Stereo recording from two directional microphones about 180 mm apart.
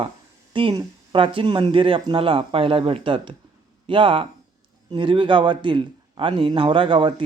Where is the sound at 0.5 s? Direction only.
25° right (ahead or behind).